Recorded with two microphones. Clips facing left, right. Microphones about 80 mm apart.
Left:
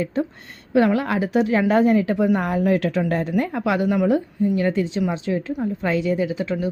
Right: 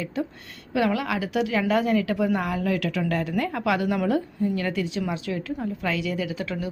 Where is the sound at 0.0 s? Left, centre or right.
Left.